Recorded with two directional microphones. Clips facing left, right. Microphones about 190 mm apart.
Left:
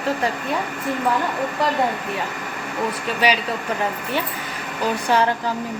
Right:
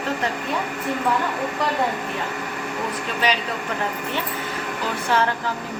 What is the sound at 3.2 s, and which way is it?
Speech, 10° left (ahead or behind).